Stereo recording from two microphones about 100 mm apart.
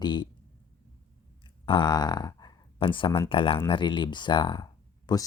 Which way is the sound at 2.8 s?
60° left (ahead or behind).